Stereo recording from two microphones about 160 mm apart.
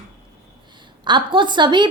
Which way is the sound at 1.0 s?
30° right (ahead or behind).